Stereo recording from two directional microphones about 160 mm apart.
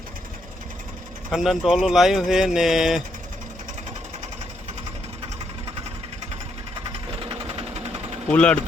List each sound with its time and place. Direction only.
1.3 s speech: centre (ahead or behind)
7.3 s sewing machine: 40° right (ahead or behind)
8.3 s speech: 5° left (ahead or behind)